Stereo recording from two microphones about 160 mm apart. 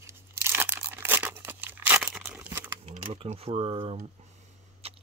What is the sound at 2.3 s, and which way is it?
Crumpling, 15° right (ahead or behind).